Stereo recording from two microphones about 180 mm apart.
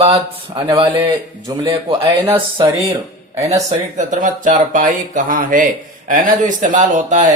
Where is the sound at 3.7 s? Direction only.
45° right (ahead or behind).